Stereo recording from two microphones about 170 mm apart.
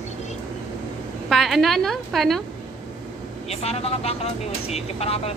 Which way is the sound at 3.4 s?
35° left (ahead or behind).